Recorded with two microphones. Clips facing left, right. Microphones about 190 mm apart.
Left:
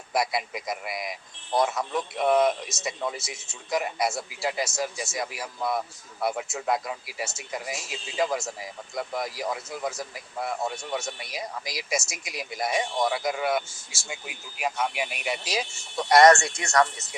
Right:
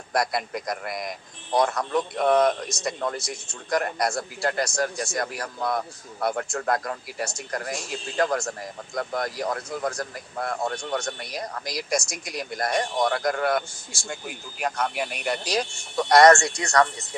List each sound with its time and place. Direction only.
0.1 s speech: 5° left (ahead or behind)
16.6 s speech: 20° left (ahead or behind)